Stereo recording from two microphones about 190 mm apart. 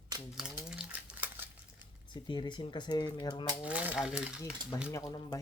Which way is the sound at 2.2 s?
25° left (ahead or behind).